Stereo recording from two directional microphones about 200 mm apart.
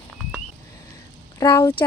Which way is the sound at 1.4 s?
15° left (ahead or behind).